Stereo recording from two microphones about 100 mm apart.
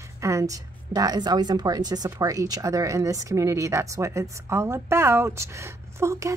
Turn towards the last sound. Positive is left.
turn(degrees=-30)  # may be behind; listen again after turning